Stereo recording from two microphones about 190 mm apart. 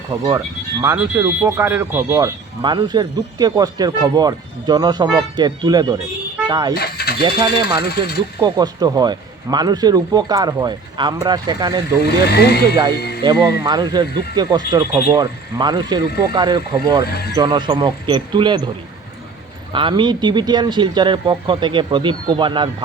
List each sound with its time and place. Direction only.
0.1 s speech: 20° right (ahead or behind)
6.7 s mechanisms: 55° left (ahead or behind)
7.2 s speech: 25° right (ahead or behind)
12.3 s speech: 60° left (ahead or behind)
13.4 s speech: 20° right (ahead or behind)
19.7 s speech: 25° right (ahead or behind)